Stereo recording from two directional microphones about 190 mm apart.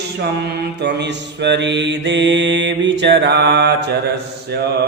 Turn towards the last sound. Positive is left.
turn(degrees=-65)  # may be behind; listen again after turning